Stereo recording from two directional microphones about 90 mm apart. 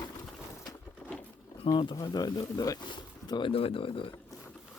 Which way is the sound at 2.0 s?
45° left (ahead or behind).